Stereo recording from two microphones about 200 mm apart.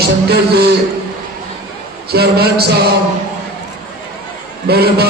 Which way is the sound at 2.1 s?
50° right (ahead or behind).